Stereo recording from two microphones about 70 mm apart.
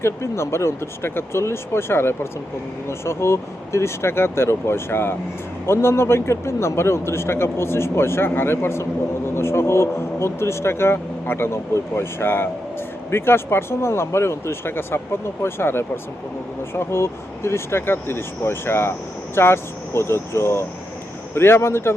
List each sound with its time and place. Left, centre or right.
0.0 s a man's voice: left